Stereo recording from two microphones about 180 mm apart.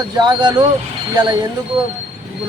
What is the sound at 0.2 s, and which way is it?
Speech, 25° right (ahead or behind).